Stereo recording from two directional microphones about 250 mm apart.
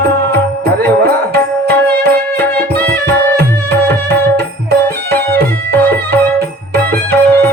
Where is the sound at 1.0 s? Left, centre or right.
Right.